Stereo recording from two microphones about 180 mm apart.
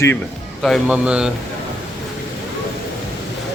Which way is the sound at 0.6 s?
5° right (ahead or behind).